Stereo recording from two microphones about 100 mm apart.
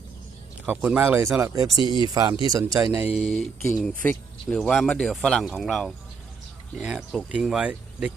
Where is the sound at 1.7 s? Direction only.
55° left (ahead or behind).